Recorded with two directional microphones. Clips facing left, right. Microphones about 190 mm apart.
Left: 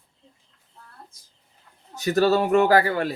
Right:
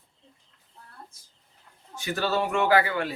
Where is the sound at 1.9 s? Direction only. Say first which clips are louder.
Left 8 dB; 40° left (ahead or behind).